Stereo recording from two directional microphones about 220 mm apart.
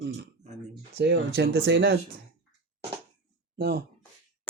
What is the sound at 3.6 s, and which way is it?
Speech, 50° right (ahead or behind).